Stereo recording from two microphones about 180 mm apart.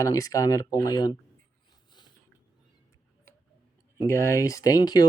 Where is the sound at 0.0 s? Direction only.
20° left (ahead or behind).